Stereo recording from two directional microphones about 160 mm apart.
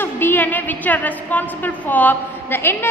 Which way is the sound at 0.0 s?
15° left (ahead or behind).